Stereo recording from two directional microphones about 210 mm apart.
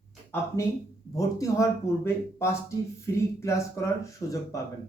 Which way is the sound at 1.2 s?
15° left (ahead or behind).